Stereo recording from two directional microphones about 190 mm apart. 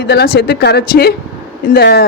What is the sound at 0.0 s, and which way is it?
Speech, 60° left (ahead or behind).